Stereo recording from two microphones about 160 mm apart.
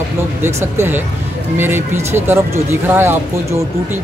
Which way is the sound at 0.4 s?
15° right (ahead or behind).